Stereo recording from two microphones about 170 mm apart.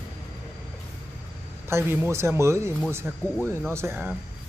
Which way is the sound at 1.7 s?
15° right (ahead or behind).